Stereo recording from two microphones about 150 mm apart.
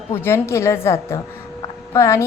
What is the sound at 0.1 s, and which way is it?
A woman's voice, 15° left (ahead or behind).